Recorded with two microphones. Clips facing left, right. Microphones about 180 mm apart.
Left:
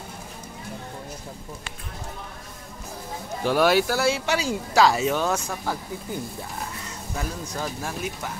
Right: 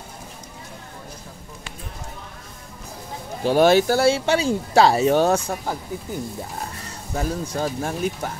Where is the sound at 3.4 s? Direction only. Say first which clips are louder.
Right 4 dB; 25° right (ahead or behind).